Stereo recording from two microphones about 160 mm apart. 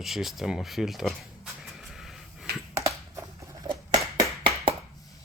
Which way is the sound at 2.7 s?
20° right (ahead or behind).